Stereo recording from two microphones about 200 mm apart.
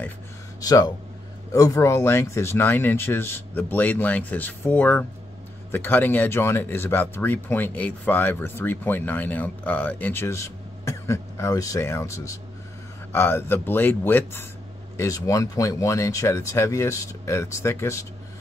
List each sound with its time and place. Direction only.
0.6 s speech: 20° left (ahead or behind)